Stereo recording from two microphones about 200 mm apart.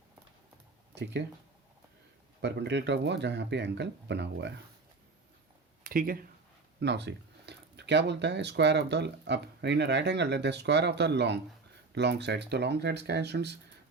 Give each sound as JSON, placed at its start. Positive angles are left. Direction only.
{"t": 2.4, "sound": "speech", "side_deg": -60}
{"t": 5.8, "sound": "speech", "side_deg": -45}
{"t": 6.7, "sound": "speech", "side_deg": -60}